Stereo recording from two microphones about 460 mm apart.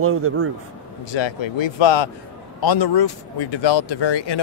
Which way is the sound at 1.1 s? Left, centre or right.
Left.